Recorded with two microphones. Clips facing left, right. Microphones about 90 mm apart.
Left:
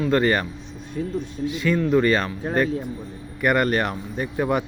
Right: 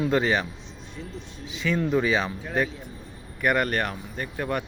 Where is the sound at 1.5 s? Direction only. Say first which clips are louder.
Left 4 dB; centre (ahead or behind).